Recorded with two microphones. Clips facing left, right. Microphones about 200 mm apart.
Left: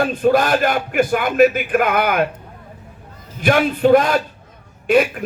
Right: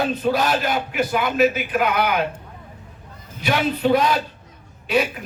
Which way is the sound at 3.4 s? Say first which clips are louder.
Left 5 dB; 50° left (ahead or behind).